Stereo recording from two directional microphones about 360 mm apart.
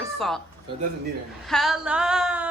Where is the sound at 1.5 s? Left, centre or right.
Centre.